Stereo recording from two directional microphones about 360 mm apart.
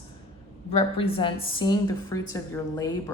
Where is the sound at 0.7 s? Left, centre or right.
Centre.